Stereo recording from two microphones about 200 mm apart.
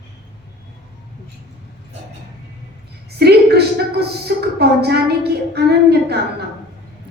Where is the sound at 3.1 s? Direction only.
55° right (ahead or behind).